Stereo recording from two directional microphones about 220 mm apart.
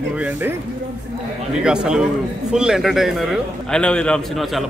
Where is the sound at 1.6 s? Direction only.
5° right (ahead or behind).